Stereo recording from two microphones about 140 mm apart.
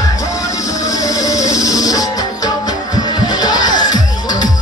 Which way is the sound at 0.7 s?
25° left (ahead or behind).